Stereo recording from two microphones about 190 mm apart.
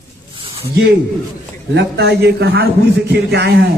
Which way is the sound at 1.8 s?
60° right (ahead or behind).